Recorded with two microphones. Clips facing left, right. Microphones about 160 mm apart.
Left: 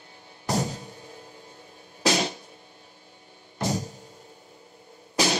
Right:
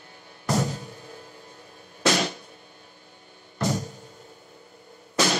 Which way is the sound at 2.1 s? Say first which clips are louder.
Right 1 dB; 55° right (ahead or behind).